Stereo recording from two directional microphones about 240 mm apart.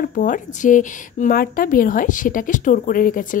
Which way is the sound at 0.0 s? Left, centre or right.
Left.